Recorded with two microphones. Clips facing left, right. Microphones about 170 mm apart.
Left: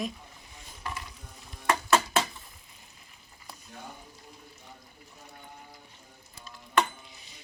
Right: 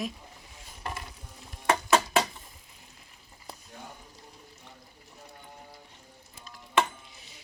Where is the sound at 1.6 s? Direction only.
15° right (ahead or behind).